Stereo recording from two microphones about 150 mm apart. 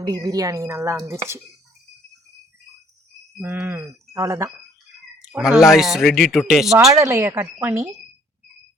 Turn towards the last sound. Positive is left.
turn(degrees=-15)  # may be behind; listen again after turning